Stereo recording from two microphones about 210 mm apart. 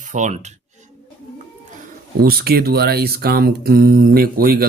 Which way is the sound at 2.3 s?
45° right (ahead or behind).